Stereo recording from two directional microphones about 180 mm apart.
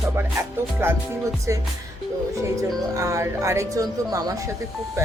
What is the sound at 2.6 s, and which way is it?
Speech, 15° right (ahead or behind).